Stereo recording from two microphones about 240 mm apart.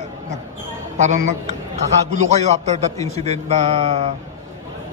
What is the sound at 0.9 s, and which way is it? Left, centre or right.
A man's voice, right.